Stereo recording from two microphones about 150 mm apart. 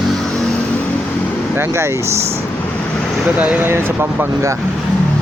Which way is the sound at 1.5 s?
15° right (ahead or behind).